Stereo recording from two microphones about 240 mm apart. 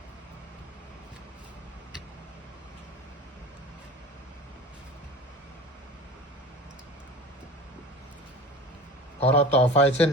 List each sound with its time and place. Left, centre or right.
9.2 s a man's voice: left